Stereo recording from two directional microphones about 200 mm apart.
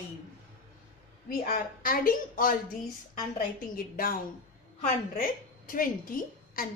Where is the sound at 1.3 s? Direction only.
45° left (ahead or behind).